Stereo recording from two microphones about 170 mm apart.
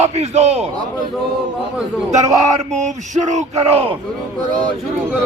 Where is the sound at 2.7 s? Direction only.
45° right (ahead or behind).